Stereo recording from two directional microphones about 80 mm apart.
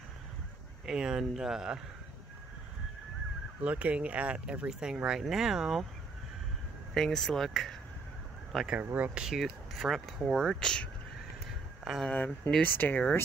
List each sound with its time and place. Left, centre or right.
0.8 s speech: centre
3.6 s speech: centre
6.9 s speech: centre
8.7 s speech: right; by 10.9 s centre
12.0 s speech: centre
12.6 s speech: left